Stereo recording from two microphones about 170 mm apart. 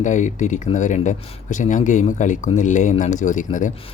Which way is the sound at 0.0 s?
45° left (ahead or behind).